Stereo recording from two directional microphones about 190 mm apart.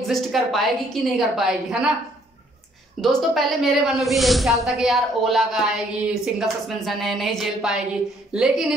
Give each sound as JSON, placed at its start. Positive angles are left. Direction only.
{"t": 0.0, "sound": "a woman's voice", "side_deg": 0}
{"t": 3.0, "sound": "a woman's voice", "side_deg": 0}